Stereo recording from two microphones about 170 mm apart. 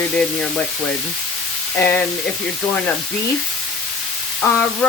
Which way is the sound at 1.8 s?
15° left (ahead or behind).